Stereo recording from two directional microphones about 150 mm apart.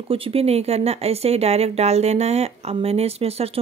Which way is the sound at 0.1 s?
40° right (ahead or behind).